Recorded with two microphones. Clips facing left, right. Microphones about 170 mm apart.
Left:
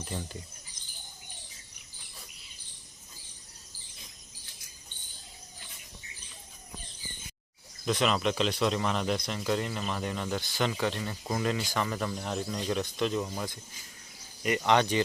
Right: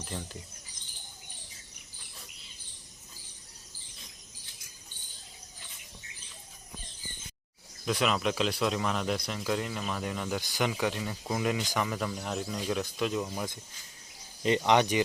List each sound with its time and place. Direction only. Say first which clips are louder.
0.1 s speech: left 1 dB; 5° left (ahead or behind)
7.9 s speech: left 1 dB; 5° right (ahead or behind)
14.7 s speech: even; 15° right (ahead or behind)